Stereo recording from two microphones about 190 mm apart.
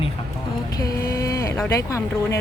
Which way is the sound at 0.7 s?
20° left (ahead or behind).